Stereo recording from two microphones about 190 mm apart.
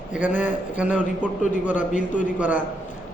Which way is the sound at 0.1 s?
10° right (ahead or behind).